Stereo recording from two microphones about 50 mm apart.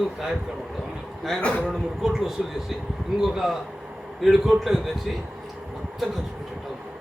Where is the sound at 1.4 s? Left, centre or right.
Left.